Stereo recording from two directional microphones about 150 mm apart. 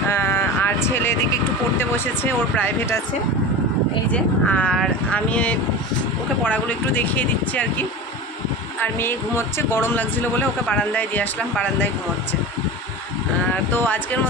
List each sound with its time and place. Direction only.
0.1 s a sound: 15° left (ahead or behind)
1.8 s speech: 10° left (ahead or behind)
4.1 s speech: 10° left (ahead or behind)
9.6 s speech: 15° left (ahead or behind)